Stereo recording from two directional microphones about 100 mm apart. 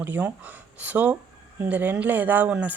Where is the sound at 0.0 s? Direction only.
15° right (ahead or behind).